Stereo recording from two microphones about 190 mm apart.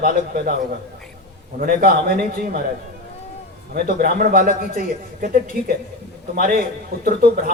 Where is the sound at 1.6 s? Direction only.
50° right (ahead or behind).